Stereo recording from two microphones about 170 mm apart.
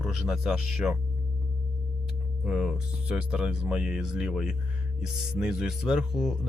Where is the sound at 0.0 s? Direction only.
Centre (ahead or behind).